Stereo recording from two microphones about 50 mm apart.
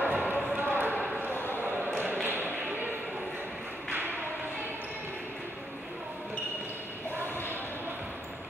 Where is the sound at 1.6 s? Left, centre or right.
Right.